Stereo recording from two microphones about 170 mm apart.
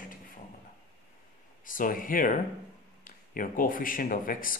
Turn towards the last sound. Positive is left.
turn(degrees=55)  # may be behind; listen again after turning